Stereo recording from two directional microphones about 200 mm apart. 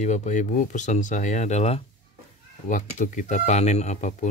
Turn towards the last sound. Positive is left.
turn(degrees=35)  # may be behind; listen again after turning